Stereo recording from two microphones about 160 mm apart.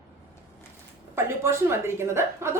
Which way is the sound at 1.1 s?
15° right (ahead or behind).